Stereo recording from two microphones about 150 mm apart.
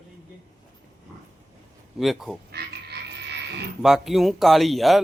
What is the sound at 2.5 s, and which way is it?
Frog, 90° right.